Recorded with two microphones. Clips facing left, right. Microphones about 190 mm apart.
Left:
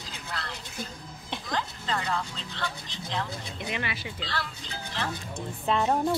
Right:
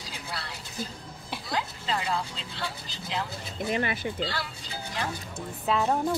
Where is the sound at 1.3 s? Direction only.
10° right (ahead or behind).